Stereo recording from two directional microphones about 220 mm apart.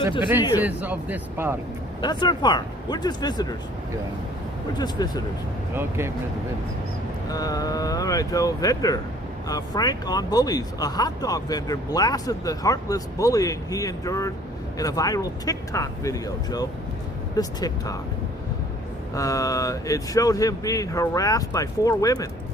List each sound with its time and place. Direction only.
0.2 s speech: 10° right (ahead or behind)
2.0 s speech: 20° left (ahead or behind)
4.8 s speech: 15° left (ahead or behind)
5.7 s speech: 10° right (ahead or behind)
7.3 s speech: 15° left (ahead or behind)
19.1 s speech: 15° left (ahead or behind)